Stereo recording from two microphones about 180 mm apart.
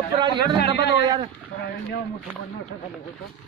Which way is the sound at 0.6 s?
70° left (ahead or behind).